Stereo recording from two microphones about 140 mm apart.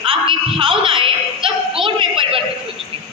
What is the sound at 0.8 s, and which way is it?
Yodeling, 40° right (ahead or behind).